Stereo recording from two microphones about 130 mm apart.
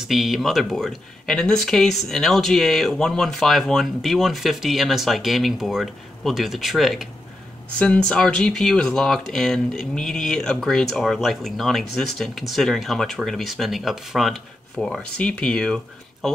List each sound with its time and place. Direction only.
0.1 s speech: centre (ahead or behind)